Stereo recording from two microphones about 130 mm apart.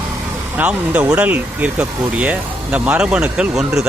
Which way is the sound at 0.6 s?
10° right (ahead or behind).